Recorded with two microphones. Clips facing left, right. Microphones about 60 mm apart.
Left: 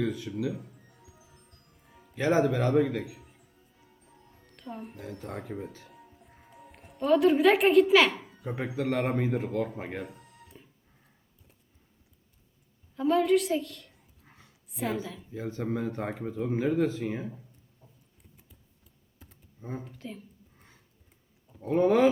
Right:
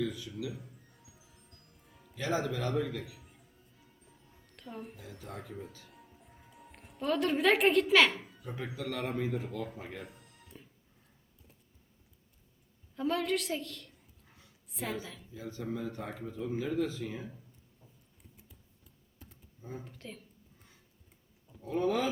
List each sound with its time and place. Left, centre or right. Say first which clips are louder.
0.0 s speech: left 6 dB; left
0.6 s music: left 4 dB; centre
2.1 s speech: left 8 dB; left
3.2 s music: left 1 dB; centre
5.2 s a man's voice: left 5 dB; left
5.9 s music: left 3 dB; centre
6.6 s a child's voice: left 7 dB; centre
8.4 s a man's voice: left 8 dB; left
10.0 s music: left 7 dB; centre
13.0 s a woman's voice: left 8 dB; centre
15.3 s speech: left 6 dB; left
19.8 s a woman's voice: left 5 dB; centre
21.6 s a man's voice: left 9 dB; left